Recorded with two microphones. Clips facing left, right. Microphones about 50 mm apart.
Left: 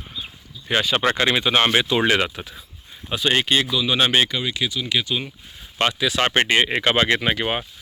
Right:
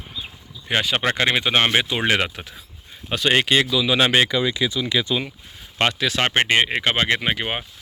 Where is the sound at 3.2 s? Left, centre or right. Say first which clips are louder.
Right 2 dB; right.